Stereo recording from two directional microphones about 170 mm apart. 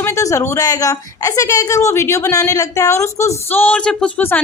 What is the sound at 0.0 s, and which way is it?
A woman's voice, 20° left (ahead or behind).